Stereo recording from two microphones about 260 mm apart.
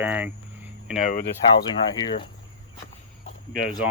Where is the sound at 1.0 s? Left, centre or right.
Left.